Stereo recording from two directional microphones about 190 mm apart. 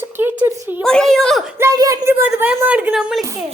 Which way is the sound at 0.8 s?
5° left (ahead or behind).